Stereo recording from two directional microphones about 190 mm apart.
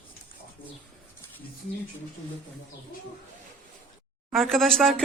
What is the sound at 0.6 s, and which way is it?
Speech, 30° left (ahead or behind).